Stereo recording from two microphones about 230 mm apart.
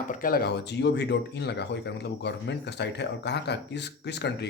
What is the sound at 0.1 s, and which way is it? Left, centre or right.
Speech, left.